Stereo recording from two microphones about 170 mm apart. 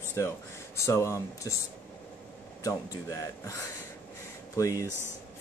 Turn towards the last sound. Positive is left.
turn(degrees=20)  # may be behind; listen again after turning